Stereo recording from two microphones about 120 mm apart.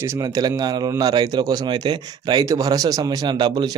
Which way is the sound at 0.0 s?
25° right (ahead or behind).